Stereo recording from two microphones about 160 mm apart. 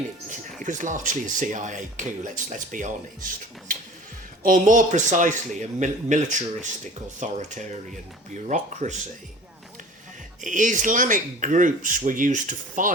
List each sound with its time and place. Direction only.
0.6 s speech: 50° right (ahead or behind)
4.4 s speech: 55° right (ahead or behind)
10.4 s speech: 50° right (ahead or behind)